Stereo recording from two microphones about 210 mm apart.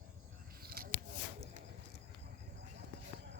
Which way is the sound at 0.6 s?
45° right (ahead or behind).